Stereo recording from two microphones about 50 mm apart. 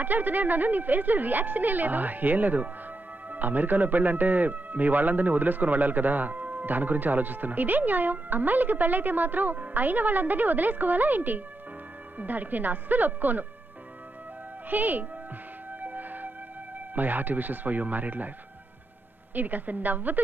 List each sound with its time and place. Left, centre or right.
0.0 s a man's voice: right
14.7 s a man's voice: right
15.8 s music: right
16.9 s a man's voice: right
19.3 s a man's voice: right